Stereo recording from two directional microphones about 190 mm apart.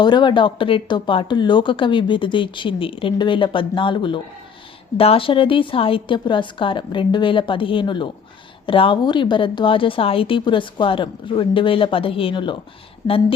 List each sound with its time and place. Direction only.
0.0 s speech: 25° left (ahead or behind)